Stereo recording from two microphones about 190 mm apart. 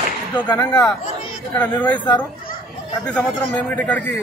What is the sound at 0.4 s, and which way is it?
Speech, 10° left (ahead or behind).